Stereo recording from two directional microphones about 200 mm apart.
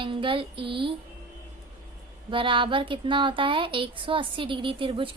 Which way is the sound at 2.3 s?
25° right (ahead or behind).